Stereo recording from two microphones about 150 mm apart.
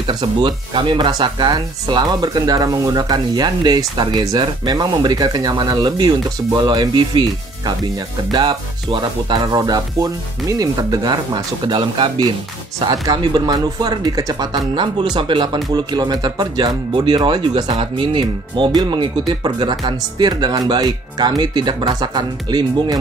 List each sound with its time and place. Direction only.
0.0 s speech: 30° right (ahead or behind)